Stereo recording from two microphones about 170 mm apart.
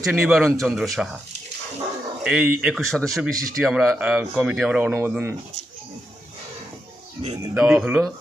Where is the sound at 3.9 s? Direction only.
10° right (ahead or behind).